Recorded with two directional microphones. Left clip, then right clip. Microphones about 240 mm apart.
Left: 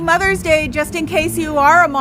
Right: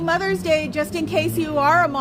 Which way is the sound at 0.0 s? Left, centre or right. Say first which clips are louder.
Left 6 dB; left.